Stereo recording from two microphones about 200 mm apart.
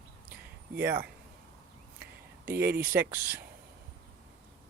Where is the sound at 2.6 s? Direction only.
10° right (ahead or behind).